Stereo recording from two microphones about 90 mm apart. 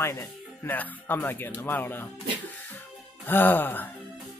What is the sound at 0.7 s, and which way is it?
A man's voice, 20° left (ahead or behind).